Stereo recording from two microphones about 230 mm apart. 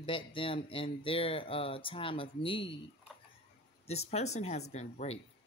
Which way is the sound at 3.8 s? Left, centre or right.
Left.